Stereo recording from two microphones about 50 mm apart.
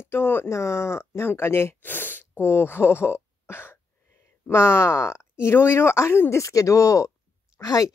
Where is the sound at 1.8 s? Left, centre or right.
Left.